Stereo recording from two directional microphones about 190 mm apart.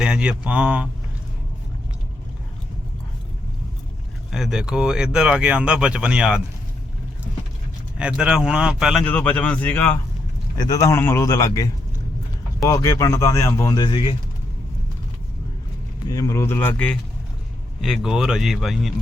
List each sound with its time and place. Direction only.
0.0 s speech: 5° right (ahead or behind)
4.3 s speech: centre (ahead or behind)
7.9 s speech: 5° right (ahead or behind)
9.0 s speech: 10° left (ahead or behind); by 14.2 s 25° left (ahead or behind)
16.0 s speech: 15° left (ahead or behind); by 18.9 s centre (ahead or behind)